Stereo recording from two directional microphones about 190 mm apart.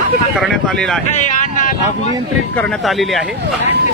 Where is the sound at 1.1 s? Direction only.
40° left (ahead or behind).